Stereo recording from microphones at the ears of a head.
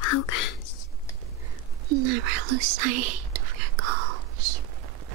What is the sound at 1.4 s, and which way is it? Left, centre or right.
Whispering, right.